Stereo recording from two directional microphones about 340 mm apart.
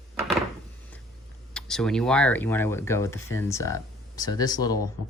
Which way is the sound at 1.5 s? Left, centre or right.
Centre.